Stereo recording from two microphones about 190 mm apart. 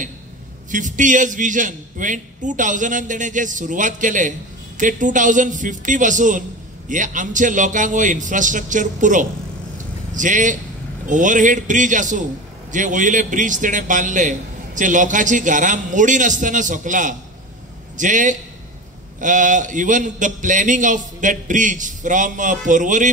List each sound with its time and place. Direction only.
0.7 s a man's voice: 40° right (ahead or behind)